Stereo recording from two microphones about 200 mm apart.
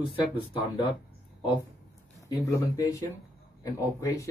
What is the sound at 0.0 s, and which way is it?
Speech, 25° left (ahead or behind).